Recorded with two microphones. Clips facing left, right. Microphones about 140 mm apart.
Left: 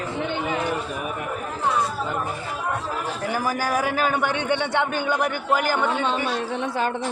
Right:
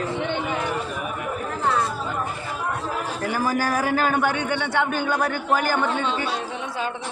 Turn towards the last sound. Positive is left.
turn(degrees=15)  # may be behind; listen again after turning